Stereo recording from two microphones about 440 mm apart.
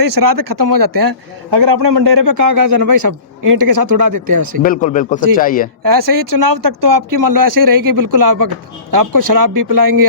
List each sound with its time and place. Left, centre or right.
0.0 s a man's voice: right
4.6 s speech: centre
5.8 s speech: right